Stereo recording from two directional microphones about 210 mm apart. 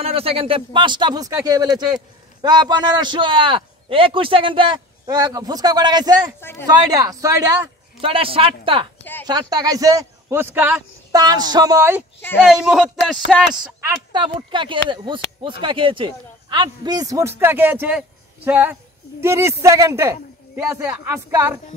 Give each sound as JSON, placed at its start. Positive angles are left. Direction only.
{"t": 0.0, "sound": "a man's voice", "side_deg": -25}
{"t": 8.0, "sound": "a man's voice", "side_deg": -25}
{"t": 13.7, "sound": "a man's voice", "side_deg": -15}